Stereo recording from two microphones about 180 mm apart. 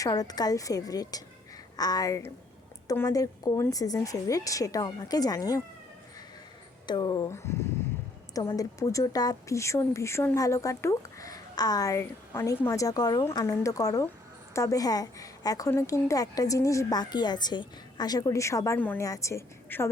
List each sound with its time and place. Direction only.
0.0 s speech: 20° left (ahead or behind)
6.8 s speech: 25° left (ahead or behind)